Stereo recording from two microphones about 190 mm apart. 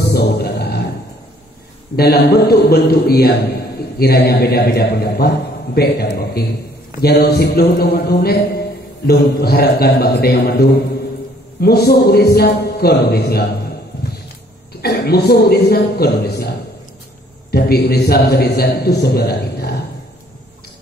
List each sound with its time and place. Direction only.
0.1 s music: 60° left (ahead or behind)
2.0 s a man's voice: 55° left (ahead or behind)
14.8 s a man's voice: 55° left (ahead or behind)
17.5 s a man's voice: 55° left (ahead or behind)